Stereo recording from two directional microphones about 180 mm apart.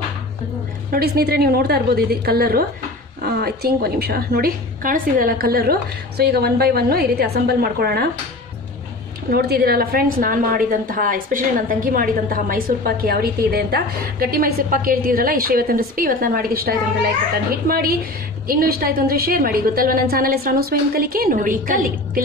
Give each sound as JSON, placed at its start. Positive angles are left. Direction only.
{"t": 0.9, "sound": "a woman's voice", "side_deg": -60}
{"t": 9.3, "sound": "a woman's voice", "side_deg": -60}